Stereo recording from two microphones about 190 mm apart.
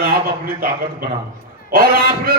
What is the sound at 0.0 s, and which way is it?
Speech, 55° right (ahead or behind).